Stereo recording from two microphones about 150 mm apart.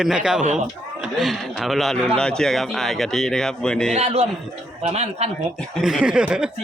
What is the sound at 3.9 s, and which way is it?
A man's voice, 45° right (ahead or behind).